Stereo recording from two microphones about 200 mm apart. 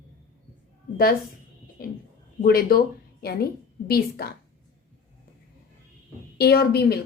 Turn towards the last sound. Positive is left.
turn(degrees=50)  # may be behind; listen again after turning